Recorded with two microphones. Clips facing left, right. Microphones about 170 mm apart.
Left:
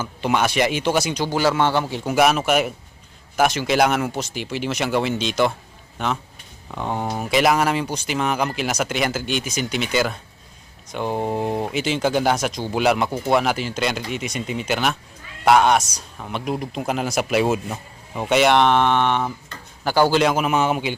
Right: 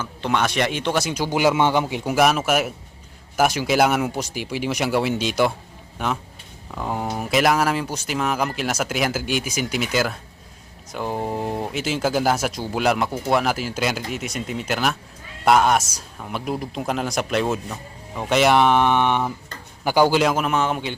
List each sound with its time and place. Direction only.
0.0 s speech: 5° left (ahead or behind)
1.3 s speech: 20° right (ahead or behind)
2.1 s speech: centre (ahead or behind)
20.2 s speech: 5° left (ahead or behind)